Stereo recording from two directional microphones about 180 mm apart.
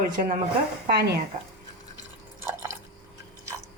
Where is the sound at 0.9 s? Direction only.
60° right (ahead or behind).